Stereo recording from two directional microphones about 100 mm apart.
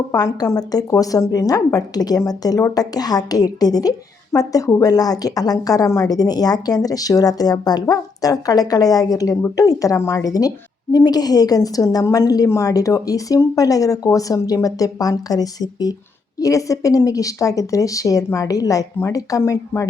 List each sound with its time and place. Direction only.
0.1 s a woman's voice: 40° left (ahead or behind)